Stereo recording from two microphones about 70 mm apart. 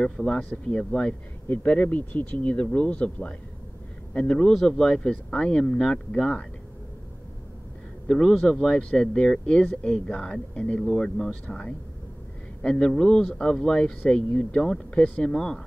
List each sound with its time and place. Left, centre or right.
0.0 s speech: centre
1.5 s speech: left
4.5 s speech: centre
8.1 s speech: centre